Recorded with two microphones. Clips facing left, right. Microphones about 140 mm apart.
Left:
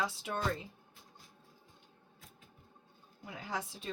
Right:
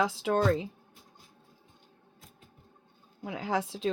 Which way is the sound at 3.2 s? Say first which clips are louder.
Right 9 dB; 90° right.